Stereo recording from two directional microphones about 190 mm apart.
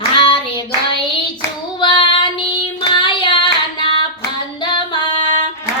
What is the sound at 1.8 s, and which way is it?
Child singing, 25° left (ahead or behind).